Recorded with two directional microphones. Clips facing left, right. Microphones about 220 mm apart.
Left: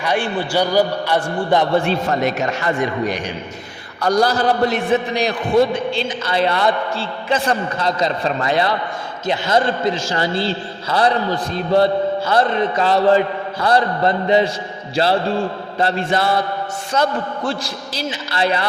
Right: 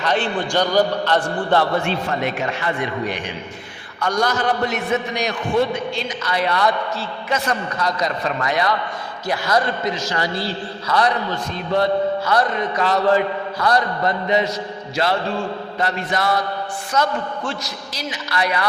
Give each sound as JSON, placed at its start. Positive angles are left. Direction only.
{"t": 0.0, "sound": "a man's voice", "side_deg": 10}
{"t": 1.7, "sound": "a man's voice", "side_deg": 35}